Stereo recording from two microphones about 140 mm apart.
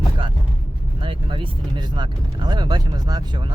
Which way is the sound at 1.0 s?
35° right (ahead or behind).